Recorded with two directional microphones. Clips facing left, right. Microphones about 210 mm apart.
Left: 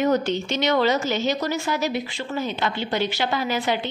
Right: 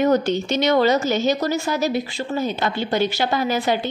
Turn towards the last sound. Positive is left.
turn(degrees=-40)  # may be behind; listen again after turning